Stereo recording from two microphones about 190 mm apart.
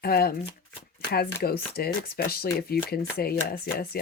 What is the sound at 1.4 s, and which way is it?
Speech, 55° left (ahead or behind).